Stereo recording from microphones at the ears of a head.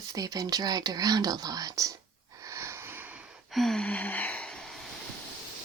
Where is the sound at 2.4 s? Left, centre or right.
Right.